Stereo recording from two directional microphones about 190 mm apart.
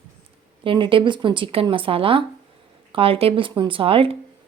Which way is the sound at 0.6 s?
25° right (ahead or behind).